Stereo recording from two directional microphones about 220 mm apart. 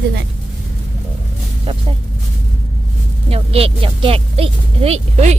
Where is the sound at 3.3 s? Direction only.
25° right (ahead or behind).